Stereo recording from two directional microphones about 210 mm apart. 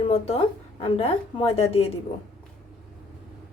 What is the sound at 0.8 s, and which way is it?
Speech, 30° left (ahead or behind).